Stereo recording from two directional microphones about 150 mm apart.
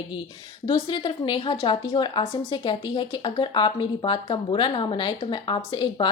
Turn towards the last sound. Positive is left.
turn(degrees=30)  # may be behind; listen again after turning